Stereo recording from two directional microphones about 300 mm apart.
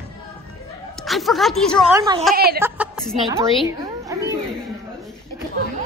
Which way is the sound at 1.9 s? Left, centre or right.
Centre.